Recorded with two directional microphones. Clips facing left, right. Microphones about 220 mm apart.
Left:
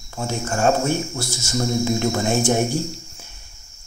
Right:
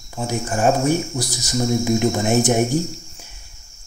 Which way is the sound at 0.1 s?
10° right (ahead or behind).